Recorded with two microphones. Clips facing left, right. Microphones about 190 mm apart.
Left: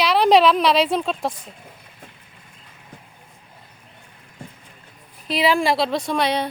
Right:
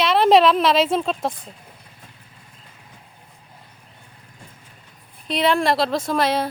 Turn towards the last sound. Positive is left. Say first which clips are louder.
# right 1 dB
turn(degrees=0)  # may be behind; listen again after turning